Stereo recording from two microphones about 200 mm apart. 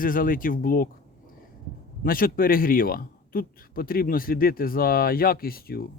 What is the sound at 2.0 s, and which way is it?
A man's voice, 45° left (ahead or behind).